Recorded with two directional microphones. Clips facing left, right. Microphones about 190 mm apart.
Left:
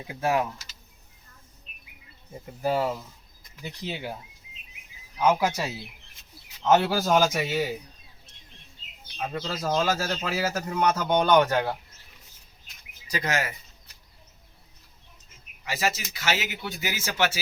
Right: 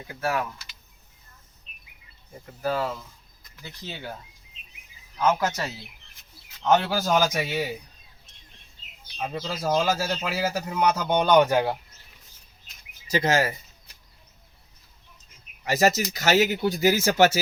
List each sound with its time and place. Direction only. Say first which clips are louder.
0.1 s speech: left 2 dB; 20° left (ahead or behind)
2.6 s a man's voice: left 1 dB; 20° left (ahead or behind); by 7.6 s centre (ahead or behind)
9.3 s speech: right 2 dB; 5° right (ahead or behind)
13.1 s speech: right 6 dB; 25° right (ahead or behind)
15.6 s speech: right 7 dB; 45° right (ahead or behind)